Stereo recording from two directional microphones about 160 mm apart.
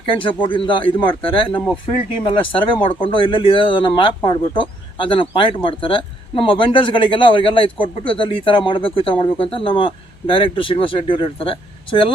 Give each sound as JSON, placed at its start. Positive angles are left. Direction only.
{"t": 0.2, "sound": "speech", "side_deg": 30}